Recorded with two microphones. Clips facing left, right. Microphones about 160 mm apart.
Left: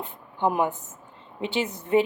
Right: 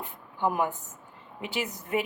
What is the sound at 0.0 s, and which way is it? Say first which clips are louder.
A woman's voice: left 3 dB; 20° left (ahead or behind).